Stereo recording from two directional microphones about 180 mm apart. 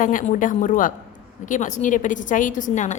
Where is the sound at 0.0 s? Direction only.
45° left (ahead or behind).